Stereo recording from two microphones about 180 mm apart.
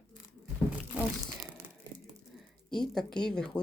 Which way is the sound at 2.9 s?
Centre (ahead or behind).